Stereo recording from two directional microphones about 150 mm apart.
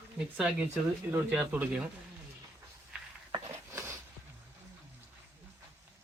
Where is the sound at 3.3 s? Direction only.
20° right (ahead or behind).